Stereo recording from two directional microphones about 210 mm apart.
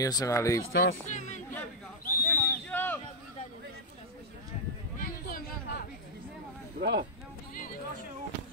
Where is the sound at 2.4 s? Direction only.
10° left (ahead or behind).